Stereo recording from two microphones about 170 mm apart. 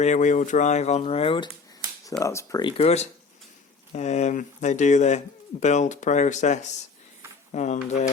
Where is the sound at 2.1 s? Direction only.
20° left (ahead or behind).